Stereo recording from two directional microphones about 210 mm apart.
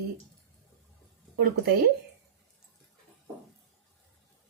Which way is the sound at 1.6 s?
50° right (ahead or behind).